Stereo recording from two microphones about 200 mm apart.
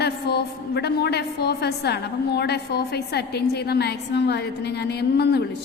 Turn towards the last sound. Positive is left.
turn(degrees=55)  # may be behind; listen again after turning